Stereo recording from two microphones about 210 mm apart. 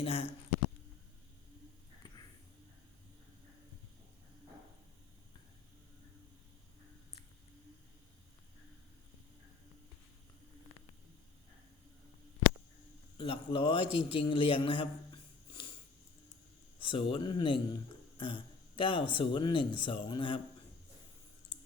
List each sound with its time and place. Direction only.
0.0 s speech: 30° left (ahead or behind)
13.1 s a man's voice: 25° left (ahead or behind)
16.8 s speech: 25° left (ahead or behind)